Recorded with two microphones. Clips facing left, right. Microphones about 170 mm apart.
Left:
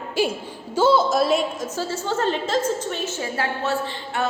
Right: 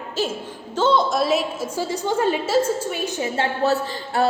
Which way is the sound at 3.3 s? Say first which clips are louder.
Right 4 dB; 35° right (ahead or behind).